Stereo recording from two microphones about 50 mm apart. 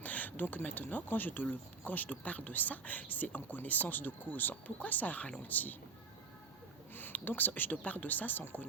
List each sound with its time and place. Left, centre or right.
0.0 s speech: left
6.9 s speech: left